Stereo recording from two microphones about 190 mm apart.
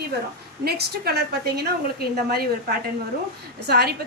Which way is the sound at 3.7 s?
55° right (ahead or behind).